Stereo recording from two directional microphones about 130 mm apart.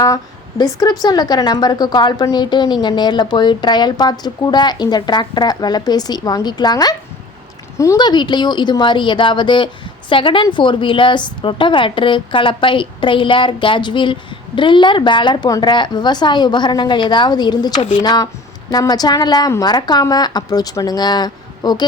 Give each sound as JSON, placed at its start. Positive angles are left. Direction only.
{"t": 0.6, "sound": "a woman's voice", "side_deg": 30}